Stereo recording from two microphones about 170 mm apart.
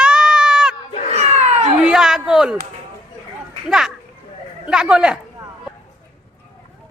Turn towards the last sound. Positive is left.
turn(degrees=-5)  # may be behind; listen again after turning